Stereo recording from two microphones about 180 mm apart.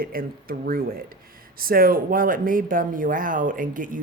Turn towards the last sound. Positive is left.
turn(degrees=-50)  # may be behind; listen again after turning